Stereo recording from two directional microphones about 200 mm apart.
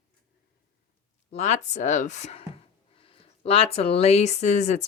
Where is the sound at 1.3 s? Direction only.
35° left (ahead or behind).